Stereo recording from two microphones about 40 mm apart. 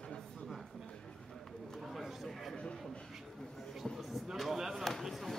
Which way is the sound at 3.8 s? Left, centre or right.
Centre.